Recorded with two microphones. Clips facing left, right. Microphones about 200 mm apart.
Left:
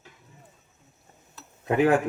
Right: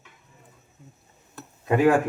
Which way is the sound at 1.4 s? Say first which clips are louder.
Right 8 dB; 50° right (ahead or behind).